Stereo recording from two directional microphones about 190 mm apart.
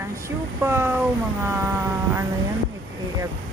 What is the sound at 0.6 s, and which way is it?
Speech, 10° right (ahead or behind).